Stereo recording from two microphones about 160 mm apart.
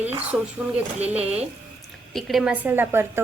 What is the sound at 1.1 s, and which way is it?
A woman's voice, 5° right (ahead or behind).